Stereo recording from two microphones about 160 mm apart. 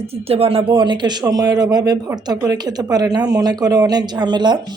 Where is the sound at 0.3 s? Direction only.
40° right (ahead or behind).